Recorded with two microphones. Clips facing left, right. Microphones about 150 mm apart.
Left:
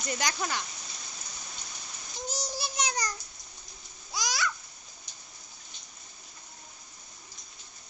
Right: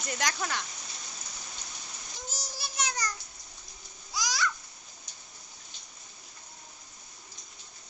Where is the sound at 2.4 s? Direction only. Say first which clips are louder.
Left 2 dB; 20° left (ahead or behind).